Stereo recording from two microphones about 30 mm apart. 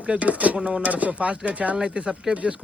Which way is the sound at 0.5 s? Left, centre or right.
Right.